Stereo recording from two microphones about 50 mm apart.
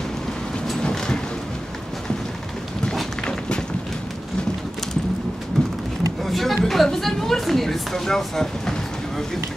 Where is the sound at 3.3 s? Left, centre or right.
Centre.